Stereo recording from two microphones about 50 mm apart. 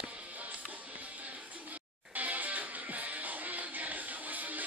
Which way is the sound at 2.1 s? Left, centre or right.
Right.